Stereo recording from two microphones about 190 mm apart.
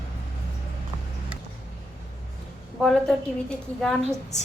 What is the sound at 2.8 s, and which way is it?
A woman's voice, centre (ahead or behind).